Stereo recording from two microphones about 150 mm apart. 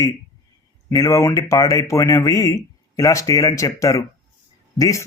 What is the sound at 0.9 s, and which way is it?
Speech, 20° left (ahead or behind).